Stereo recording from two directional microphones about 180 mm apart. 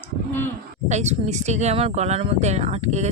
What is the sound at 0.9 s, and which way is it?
Speech, 40° right (ahead or behind).